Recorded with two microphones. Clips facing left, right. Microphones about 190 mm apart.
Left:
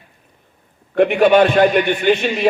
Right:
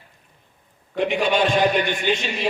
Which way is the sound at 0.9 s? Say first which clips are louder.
Left 9 dB; 60° left (ahead or behind).